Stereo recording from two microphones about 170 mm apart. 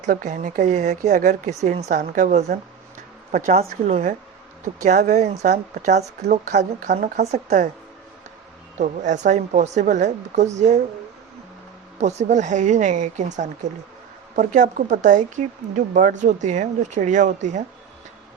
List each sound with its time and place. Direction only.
0.1 s speech: 50° right (ahead or behind)
6.5 s a woman's voice: 75° right (ahead or behind); by 7.3 s 55° right (ahead or behind)
7.3 s speech: 45° right (ahead or behind)
8.8 s speech: 45° right (ahead or behind)
11.9 s speech: 40° right (ahead or behind)